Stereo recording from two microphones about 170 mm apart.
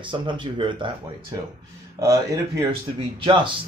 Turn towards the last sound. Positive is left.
turn(degrees=-30)  # may be behind; listen again after turning